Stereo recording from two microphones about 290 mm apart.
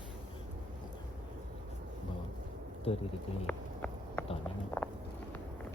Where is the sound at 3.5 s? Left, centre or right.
Centre.